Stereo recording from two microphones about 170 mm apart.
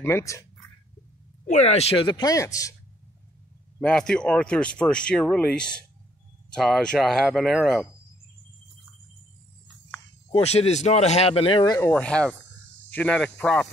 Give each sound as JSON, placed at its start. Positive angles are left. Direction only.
{"t": 0.0, "sound": "cricket", "side_deg": 15}
{"t": 1.5, "sound": "speech", "side_deg": 40}
{"t": 3.8, "sound": "speech", "side_deg": 5}
{"t": 10.3, "sound": "speech", "side_deg": 40}
{"t": 11.9, "sound": "cricket", "side_deg": 5}